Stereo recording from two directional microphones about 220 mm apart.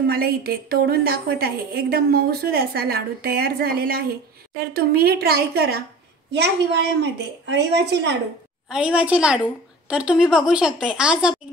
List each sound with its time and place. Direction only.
0.1 s a woman's voice: 45° right (ahead or behind)
8.6 s a woman's voice: 5° right (ahead or behind)